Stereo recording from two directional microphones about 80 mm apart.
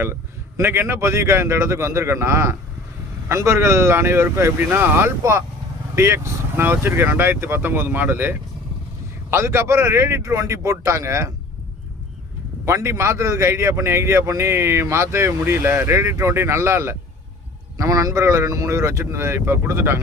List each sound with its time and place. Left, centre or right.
0.0 s a man's voice: right
12.6 s a man's voice: right
17.7 s a man's voice: right